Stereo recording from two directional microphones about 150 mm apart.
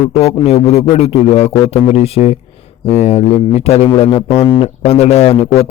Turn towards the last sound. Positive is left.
turn(degrees=40)  # may be behind; listen again after turning